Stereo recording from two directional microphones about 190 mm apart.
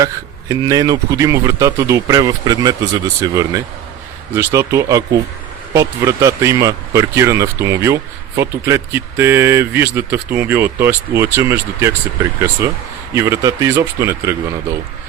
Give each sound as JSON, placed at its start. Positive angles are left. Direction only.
{"t": 0.0, "sound": "speech", "side_deg": -20}